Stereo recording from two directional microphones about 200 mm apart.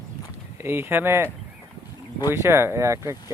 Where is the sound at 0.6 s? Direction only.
10° right (ahead or behind).